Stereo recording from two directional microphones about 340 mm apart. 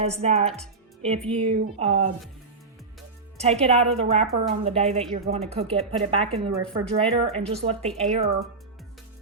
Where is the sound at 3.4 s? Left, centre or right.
Centre.